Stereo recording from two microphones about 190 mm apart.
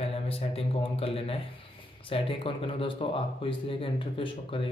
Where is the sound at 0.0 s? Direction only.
30° left (ahead or behind).